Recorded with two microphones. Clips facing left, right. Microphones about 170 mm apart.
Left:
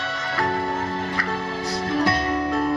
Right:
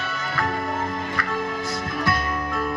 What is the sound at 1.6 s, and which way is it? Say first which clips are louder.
Music: left 4 dB; 30° left (ahead or behind).